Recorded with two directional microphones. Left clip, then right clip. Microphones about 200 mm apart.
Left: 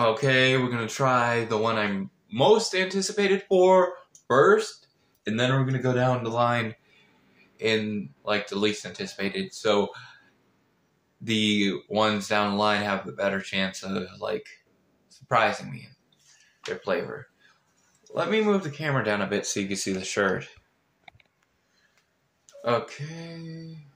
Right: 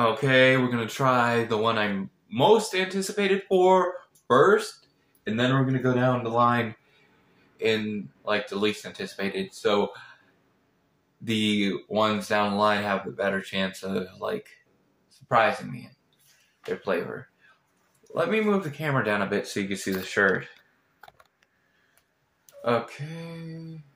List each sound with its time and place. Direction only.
0.0 s speech: 10° left (ahead or behind)
5.2 s speech: 20° left (ahead or behind)
11.2 s speech: 10° left (ahead or behind)
18.1 s speech: 5° left (ahead or behind)
22.6 s speech: 5° left (ahead or behind)